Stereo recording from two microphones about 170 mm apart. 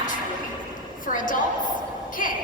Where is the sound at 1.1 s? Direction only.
50° left (ahead or behind).